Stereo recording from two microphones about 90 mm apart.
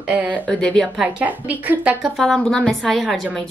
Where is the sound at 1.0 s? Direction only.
15° right (ahead or behind).